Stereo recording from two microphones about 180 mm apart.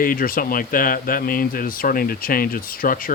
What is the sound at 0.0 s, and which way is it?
Speech, 50° left (ahead or behind).